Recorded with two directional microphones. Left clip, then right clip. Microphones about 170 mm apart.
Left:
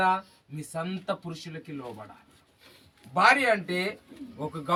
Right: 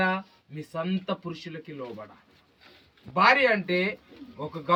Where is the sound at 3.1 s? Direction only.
15° left (ahead or behind).